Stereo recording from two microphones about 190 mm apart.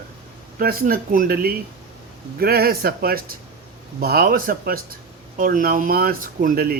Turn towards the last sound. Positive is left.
turn(degrees=-50)  # may be behind; listen again after turning